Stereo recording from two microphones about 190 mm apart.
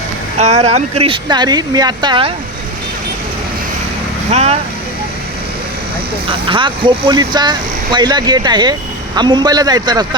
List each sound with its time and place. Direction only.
0.3 s speech: 35° right (ahead or behind)
4.3 s speech: 35° right (ahead or behind)
6.2 s speech: 25° right (ahead or behind)